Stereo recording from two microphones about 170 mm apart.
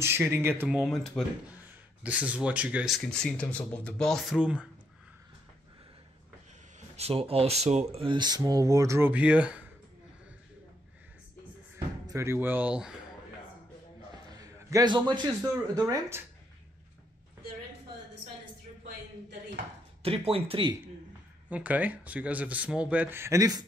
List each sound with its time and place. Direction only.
0.0 s speech: 15° right (ahead or behind)
0.7 s speech: centre (ahead or behind)
7.0 s speech: 35° right (ahead or behind); by 9.7 s 10° right (ahead or behind)
11.7 s speech: 15° right (ahead or behind)
14.3 s a sound: 20° right (ahead or behind)
15.7 s speech: 15° right (ahead or behind)
20.0 s speech: 35° right (ahead or behind)
21.5 s speech: 10° right (ahead or behind)